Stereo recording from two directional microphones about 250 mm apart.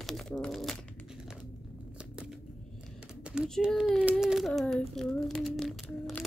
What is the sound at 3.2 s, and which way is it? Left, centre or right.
A child's voice, centre.